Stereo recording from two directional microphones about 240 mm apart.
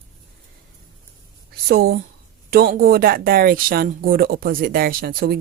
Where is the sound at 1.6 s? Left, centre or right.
Right.